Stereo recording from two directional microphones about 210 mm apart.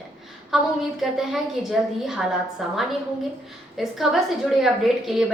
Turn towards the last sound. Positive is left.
turn(degrees=0)  # may be behind; listen again after turning